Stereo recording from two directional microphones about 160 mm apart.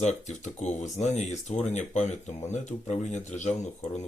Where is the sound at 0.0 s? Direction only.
45° left (ahead or behind).